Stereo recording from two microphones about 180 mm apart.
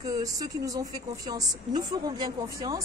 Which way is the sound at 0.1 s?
20° right (ahead or behind).